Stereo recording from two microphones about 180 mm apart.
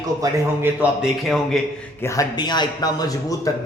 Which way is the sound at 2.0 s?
15° left (ahead or behind).